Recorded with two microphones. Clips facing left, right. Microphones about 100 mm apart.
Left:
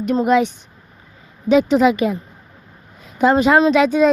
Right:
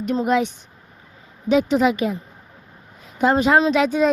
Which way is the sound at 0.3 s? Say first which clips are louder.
Left 4 dB; 90° left.